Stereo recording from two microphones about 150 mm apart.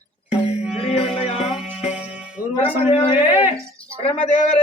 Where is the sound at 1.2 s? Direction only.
45° left (ahead or behind).